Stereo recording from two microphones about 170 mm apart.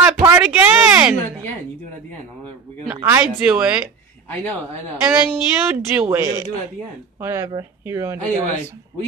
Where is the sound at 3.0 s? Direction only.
15° right (ahead or behind).